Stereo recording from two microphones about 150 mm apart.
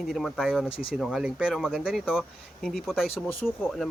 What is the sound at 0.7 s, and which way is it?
Speech, 35° left (ahead or behind).